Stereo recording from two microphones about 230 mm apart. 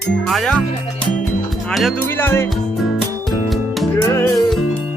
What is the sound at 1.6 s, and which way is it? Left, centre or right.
Speech, centre.